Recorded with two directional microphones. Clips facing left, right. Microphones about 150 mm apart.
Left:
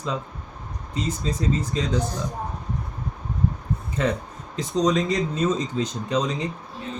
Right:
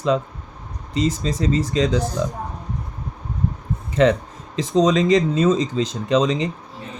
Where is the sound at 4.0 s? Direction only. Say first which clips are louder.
Right 9 dB; 80° right.